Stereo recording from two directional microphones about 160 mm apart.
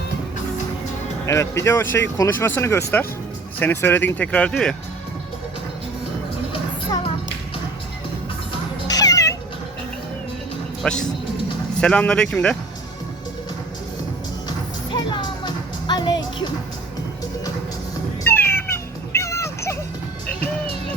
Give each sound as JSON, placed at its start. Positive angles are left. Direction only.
{"t": 1.3, "sound": "speech", "side_deg": 20}
{"t": 6.5, "sound": "music", "side_deg": 35}
{"t": 8.9, "sound": "cat", "side_deg": 25}
{"t": 10.8, "sound": "speech", "side_deg": 5}
{"t": 14.9, "sound": "music", "side_deg": 30}
{"t": 18.3, "sound": "cat", "side_deg": 15}